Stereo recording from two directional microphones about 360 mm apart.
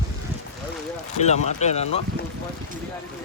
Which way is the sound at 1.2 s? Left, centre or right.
Centre.